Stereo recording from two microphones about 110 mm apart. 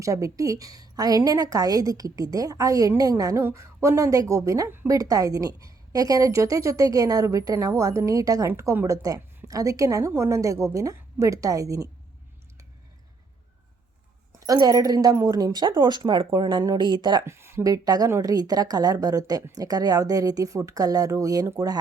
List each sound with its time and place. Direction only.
0.0 s a woman's voice: 30° right (ahead or behind)
14.3 s a woman's voice: 35° right (ahead or behind)
17.2 s a woman's voice: 25° right (ahead or behind)